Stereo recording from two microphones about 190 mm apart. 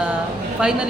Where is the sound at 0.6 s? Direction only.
5° right (ahead or behind).